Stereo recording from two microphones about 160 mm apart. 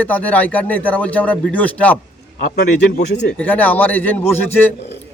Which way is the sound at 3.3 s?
10° left (ahead or behind).